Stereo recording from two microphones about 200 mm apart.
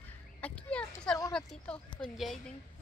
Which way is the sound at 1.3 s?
5° left (ahead or behind).